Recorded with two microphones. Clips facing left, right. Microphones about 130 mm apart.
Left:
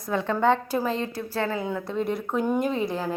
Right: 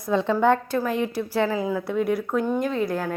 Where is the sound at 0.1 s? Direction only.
20° right (ahead or behind).